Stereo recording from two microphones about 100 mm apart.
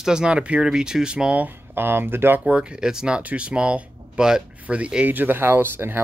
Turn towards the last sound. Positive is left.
turn(degrees=-20)  # may be behind; listen again after turning